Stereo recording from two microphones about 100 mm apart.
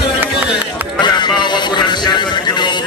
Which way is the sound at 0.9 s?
50° left (ahead or behind).